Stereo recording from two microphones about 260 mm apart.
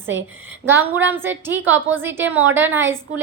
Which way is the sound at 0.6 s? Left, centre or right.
Centre.